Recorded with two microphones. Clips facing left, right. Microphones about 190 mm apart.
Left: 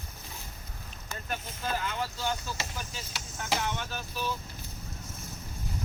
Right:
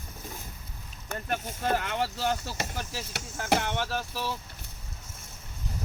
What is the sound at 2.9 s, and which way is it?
Speech, 75° right (ahead or behind).